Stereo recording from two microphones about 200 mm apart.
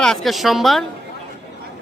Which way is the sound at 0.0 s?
Centre (ahead or behind).